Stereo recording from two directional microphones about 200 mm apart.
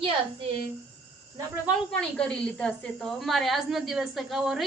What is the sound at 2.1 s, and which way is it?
A woman's voice, 5° left (ahead or behind).